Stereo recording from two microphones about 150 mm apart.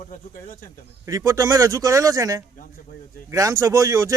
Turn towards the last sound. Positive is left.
turn(degrees=-20)  # may be behind; listen again after turning